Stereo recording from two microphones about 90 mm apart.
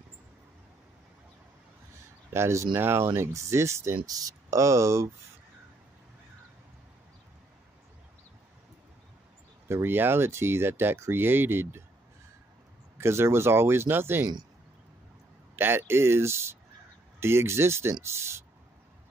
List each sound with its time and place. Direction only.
2.3 s speech: 30° right (ahead or behind)
4.0 s speech: 45° right (ahead or behind)
9.7 s speech: 25° right (ahead or behind)
12.9 s speech: 30° right (ahead or behind)
15.5 s speech: 25° right (ahead or behind)